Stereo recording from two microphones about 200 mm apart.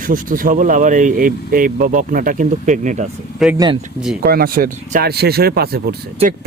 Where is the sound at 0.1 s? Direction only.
45° right (ahead or behind).